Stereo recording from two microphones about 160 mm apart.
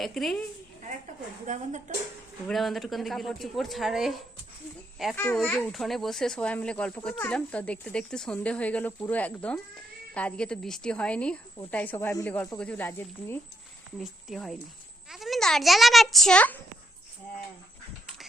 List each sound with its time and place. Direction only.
0.0 s speech: centre (ahead or behind)
1.5 s speech: 50° right (ahead or behind)
2.5 s speech: centre (ahead or behind)
5.1 s speech: 15° left (ahead or behind)
14.0 s speech: centre (ahead or behind)